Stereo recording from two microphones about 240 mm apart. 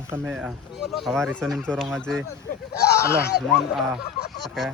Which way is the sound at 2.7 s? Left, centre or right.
Left.